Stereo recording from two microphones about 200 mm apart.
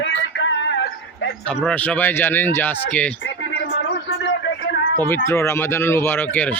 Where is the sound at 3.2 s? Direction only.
70° left (ahead or behind).